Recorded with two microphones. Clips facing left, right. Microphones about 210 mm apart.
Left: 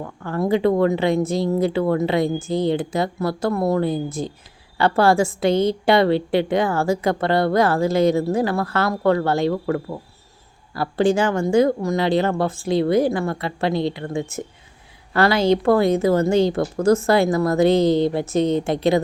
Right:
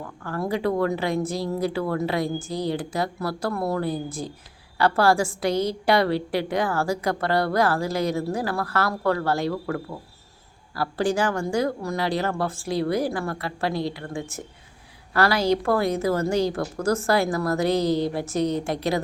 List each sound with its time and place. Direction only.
0.3 s a woman's voice: 25° left (ahead or behind)